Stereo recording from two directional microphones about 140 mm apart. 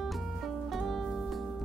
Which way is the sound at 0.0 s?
Centre (ahead or behind).